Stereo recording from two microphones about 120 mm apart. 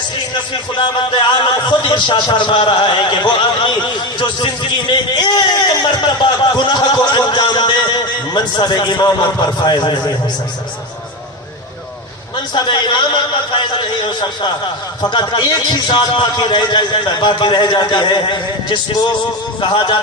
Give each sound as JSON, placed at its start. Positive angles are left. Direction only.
{"t": 0.8, "sound": "a man's voice", "side_deg": 40}
{"t": 5.1, "sound": "a sound", "side_deg": 35}
{"t": 12.5, "sound": "a man's voice", "side_deg": 40}